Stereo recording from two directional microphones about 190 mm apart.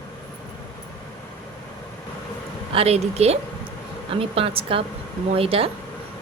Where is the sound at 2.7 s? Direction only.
35° right (ahead or behind).